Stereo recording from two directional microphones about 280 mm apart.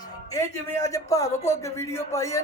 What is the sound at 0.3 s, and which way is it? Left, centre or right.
A man's voice, centre.